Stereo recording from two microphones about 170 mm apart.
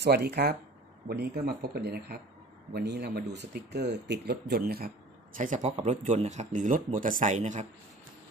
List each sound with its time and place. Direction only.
0.0 s speech: 70° right (ahead or behind); by 7.6 s 45° right (ahead or behind)